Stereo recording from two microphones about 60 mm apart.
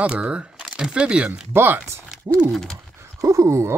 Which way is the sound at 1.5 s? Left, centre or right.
Right.